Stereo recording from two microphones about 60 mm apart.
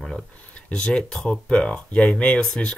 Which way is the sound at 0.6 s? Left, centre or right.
Centre.